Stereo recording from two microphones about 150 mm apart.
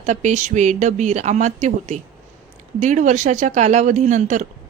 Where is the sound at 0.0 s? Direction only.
50° right (ahead or behind).